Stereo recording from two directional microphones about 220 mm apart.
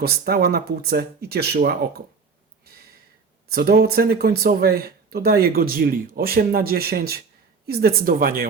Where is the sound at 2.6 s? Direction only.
45° right (ahead or behind).